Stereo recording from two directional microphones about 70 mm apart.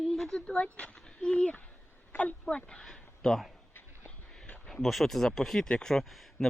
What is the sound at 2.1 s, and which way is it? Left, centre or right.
A woman's voice, centre.